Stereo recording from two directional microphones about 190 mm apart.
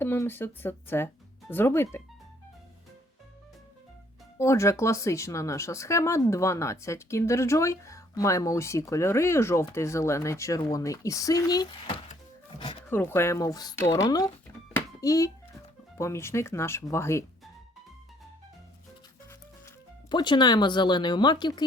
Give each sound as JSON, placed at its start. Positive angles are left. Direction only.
{"t": 0.0, "sound": "speech", "side_deg": 10}
{"t": 4.4, "sound": "speech", "side_deg": 15}
{"t": 12.5, "sound": "music", "side_deg": 25}
{"t": 12.9, "sound": "speech", "side_deg": 10}
{"t": 20.1, "sound": "speech", "side_deg": 25}